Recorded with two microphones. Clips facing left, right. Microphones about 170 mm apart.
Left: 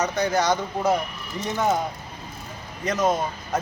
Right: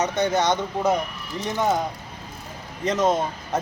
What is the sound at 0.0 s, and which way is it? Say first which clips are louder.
Speech: right 1 dB; 25° right (ahead or behind).